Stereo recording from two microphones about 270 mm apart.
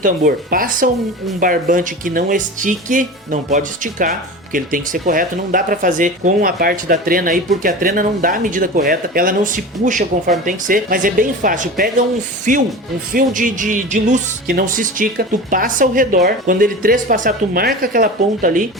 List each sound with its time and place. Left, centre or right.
0.0 s speech: right